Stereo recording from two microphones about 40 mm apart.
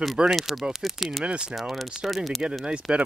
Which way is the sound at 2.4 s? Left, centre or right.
Centre.